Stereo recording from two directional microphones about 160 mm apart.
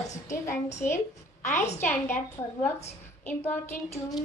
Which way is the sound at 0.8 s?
55° left (ahead or behind).